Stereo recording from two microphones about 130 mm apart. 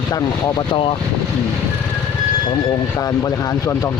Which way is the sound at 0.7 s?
40° left (ahead or behind).